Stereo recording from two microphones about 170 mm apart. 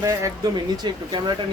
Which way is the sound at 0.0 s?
20° right (ahead or behind).